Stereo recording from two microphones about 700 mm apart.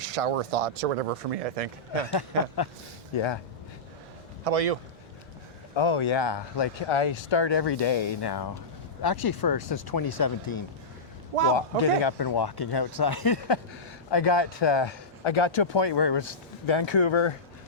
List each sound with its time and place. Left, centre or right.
0.1 s speech: right
3.2 s speech: left
4.4 s speech: right
5.7 s speech: left
11.8 s speech: left